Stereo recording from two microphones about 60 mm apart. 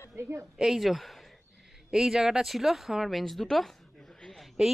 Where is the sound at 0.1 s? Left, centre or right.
Right.